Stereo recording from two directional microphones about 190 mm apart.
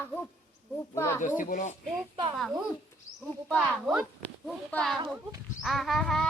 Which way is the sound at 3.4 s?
5° left (ahead or behind).